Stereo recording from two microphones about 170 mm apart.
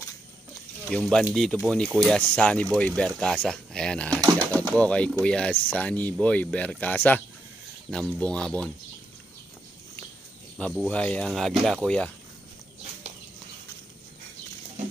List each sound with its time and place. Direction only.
0.8 s speech: 5° left (ahead or behind)
4.1 s speech: 20° right (ahead or behind)
4.6 s speech: 5° left (ahead or behind)
10.6 s speech: 5° left (ahead or behind)